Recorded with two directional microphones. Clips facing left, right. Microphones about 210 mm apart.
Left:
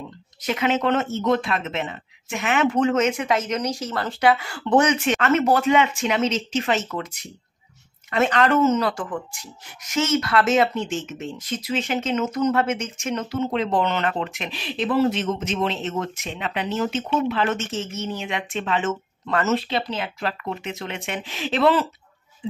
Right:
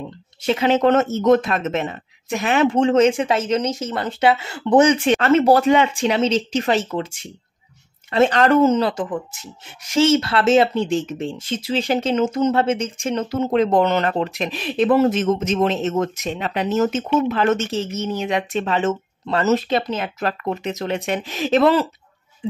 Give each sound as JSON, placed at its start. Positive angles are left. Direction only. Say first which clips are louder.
{"t": 0.4, "sound": "speech", "louder": "right 5 dB", "side_deg": -30}